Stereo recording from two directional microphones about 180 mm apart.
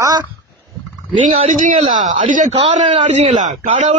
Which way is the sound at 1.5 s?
50° right (ahead or behind).